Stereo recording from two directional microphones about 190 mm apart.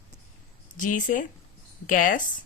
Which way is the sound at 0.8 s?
45° left (ahead or behind).